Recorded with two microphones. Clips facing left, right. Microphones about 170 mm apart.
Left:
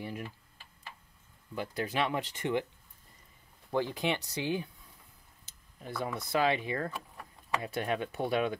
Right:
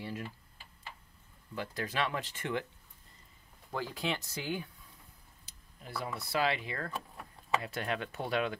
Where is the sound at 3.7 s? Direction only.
20° left (ahead or behind).